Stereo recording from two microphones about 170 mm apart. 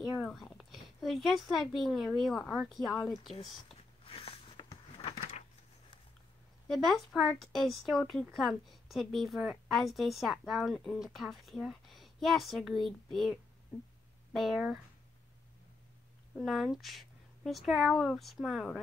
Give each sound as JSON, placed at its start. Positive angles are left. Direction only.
{"t": 0.2, "sound": "speech", "side_deg": 0}
{"t": 4.0, "sound": "a sound", "side_deg": 35}
{"t": 6.7, "sound": "speech", "side_deg": 0}
{"t": 16.3, "sound": "speech", "side_deg": 0}